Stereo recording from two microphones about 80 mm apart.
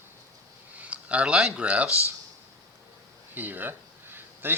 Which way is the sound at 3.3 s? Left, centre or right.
Right.